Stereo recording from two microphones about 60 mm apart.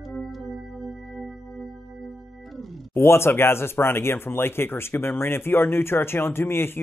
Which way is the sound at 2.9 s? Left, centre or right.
Left.